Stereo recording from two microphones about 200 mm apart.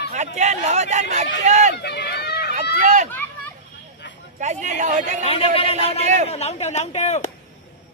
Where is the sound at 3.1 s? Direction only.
10° left (ahead or behind).